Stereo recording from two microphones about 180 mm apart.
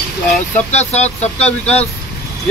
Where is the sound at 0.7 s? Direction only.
35° left (ahead or behind).